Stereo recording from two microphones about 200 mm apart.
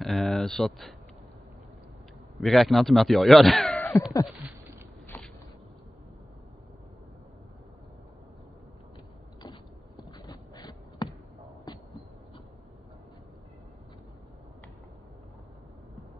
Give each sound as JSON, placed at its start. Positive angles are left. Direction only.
{"t": 0.0, "sound": "speech", "side_deg": 0}
{"t": 2.4, "sound": "speech", "side_deg": 0}
{"t": 5.0, "sound": "walk", "side_deg": 10}
{"t": 10.1, "sound": "a sound", "side_deg": 20}
{"t": 11.7, "sound": "heart murmur", "side_deg": 20}